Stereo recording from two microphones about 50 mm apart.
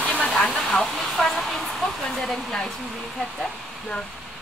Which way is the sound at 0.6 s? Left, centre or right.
Centre.